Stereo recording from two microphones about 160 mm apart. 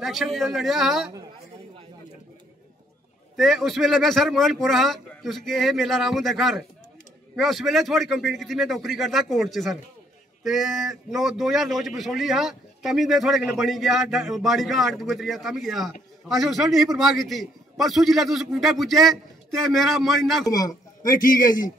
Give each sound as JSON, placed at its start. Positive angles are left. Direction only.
{"t": 0.0, "sound": "a man's voice", "side_deg": 0}
{"t": 3.3, "sound": "a man's voice", "side_deg": 0}
{"t": 20.4, "sound": "speech", "side_deg": 25}